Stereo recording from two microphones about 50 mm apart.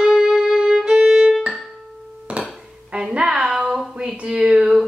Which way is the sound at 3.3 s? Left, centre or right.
Centre.